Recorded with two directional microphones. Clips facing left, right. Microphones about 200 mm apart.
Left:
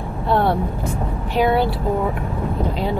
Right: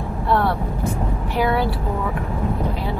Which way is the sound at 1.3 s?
25° left (ahead or behind).